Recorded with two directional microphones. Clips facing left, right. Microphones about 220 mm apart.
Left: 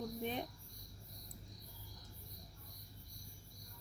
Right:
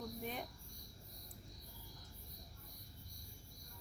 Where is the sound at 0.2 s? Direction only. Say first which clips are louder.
Left 6 dB; 20° left (ahead or behind).